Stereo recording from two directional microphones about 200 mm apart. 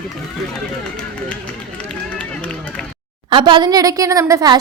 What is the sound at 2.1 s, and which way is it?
Run, 5° left (ahead or behind).